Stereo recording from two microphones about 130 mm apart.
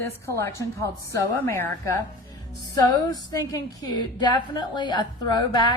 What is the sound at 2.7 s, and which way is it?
A woman's voice, 30° left (ahead or behind).